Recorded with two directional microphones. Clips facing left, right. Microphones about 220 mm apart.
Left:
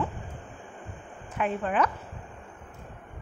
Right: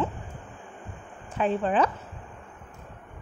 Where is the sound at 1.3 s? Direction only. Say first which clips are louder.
Right 3 dB; 30° right (ahead or behind).